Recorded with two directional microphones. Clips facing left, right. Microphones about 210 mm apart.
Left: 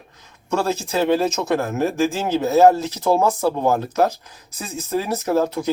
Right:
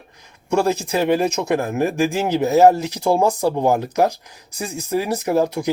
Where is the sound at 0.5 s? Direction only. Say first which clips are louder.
Right 3 dB; 15° right (ahead or behind).